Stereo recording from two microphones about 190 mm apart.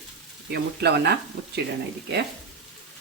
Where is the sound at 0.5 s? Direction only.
60° right (ahead or behind).